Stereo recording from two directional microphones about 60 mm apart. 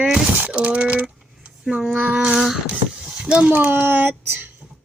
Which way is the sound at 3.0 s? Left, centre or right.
Centre.